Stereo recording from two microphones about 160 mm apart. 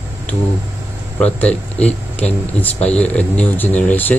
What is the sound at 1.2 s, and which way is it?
Speech, 10° left (ahead or behind).